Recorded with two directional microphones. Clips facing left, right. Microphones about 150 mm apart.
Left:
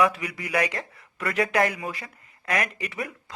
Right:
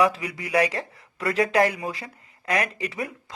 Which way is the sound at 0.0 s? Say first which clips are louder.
Right 1 dB; 30° right (ahead or behind).